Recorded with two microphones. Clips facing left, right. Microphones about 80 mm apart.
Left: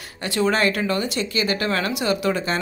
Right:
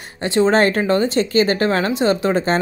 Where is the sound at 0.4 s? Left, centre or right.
Right.